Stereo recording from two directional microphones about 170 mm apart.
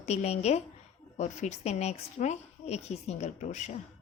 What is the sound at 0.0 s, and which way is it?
A woman's voice, 40° left (ahead or behind).